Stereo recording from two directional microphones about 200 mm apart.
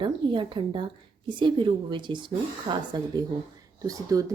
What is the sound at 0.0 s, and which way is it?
Speech, 25° right (ahead or behind).